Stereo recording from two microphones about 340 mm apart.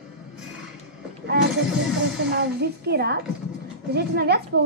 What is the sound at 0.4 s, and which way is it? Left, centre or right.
Music, centre.